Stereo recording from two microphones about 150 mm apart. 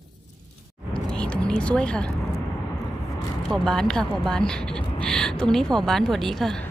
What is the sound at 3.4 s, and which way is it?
Speech, 5° left (ahead or behind).